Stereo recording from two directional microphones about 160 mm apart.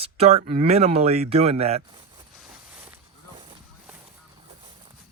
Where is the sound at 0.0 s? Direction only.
40° right (ahead or behind).